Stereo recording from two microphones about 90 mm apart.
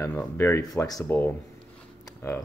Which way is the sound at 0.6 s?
45° left (ahead or behind).